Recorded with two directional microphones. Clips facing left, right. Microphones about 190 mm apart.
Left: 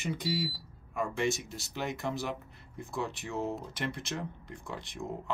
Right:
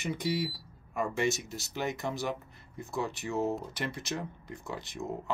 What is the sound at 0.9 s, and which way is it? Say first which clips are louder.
Speech: right 1 dB; 5° right (ahead or behind).